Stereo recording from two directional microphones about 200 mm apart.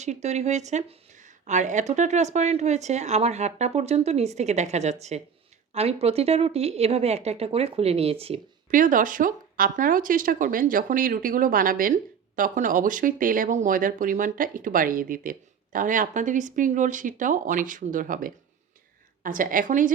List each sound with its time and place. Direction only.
0.0 s speech: 35° right (ahead or behind)
8.7 s speech: 40° right (ahead or behind)